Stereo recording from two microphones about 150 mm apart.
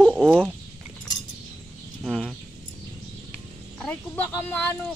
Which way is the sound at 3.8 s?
10° left (ahead or behind).